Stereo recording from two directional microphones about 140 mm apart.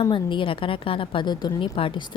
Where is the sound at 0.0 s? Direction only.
35° left (ahead or behind).